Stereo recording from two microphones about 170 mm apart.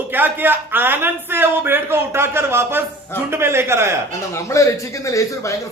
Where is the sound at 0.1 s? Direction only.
10° right (ahead or behind).